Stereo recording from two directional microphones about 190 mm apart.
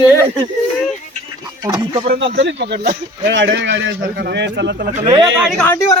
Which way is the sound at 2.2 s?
70° right (ahead or behind).